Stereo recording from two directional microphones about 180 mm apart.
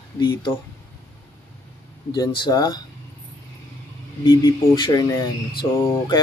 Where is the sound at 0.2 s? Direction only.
25° left (ahead or behind).